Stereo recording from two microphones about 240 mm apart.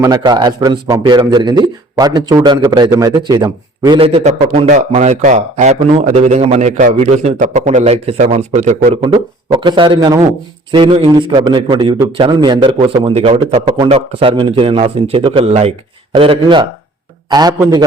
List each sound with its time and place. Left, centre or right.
0.0 s a man's voice: centre